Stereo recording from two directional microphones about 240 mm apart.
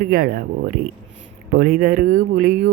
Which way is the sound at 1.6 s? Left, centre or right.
Right.